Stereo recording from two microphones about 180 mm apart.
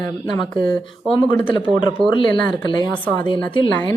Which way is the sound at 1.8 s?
25° left (ahead or behind).